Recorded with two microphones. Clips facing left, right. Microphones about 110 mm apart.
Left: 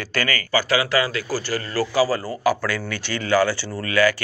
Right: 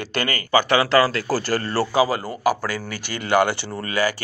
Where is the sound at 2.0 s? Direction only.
20° right (ahead or behind).